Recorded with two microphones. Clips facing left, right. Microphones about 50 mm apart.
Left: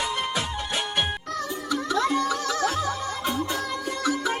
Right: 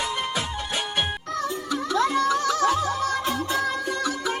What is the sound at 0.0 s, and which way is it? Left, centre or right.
Music, centre.